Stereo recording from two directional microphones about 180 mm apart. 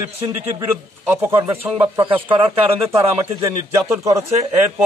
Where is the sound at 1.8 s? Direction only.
25° right (ahead or behind).